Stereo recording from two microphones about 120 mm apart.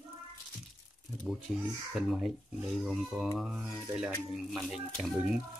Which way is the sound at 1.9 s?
5° right (ahead or behind).